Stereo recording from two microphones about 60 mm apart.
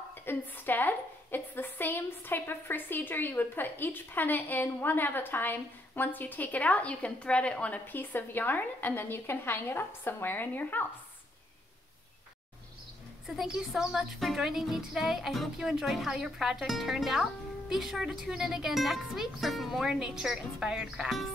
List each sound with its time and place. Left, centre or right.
0.1 s a woman's voice: left
7.8 s a woman's voice: left
13.4 s speech: centre